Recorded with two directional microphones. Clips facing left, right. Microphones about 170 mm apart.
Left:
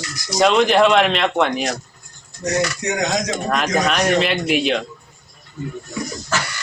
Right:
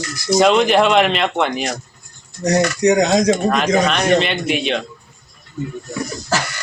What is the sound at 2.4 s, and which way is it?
Speech, 35° right (ahead or behind).